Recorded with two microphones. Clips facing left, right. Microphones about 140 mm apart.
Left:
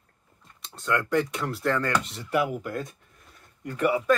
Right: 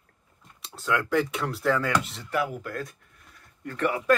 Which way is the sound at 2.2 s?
15° left (ahead or behind).